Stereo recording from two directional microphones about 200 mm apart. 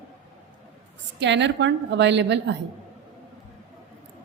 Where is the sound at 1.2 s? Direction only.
65° right (ahead or behind).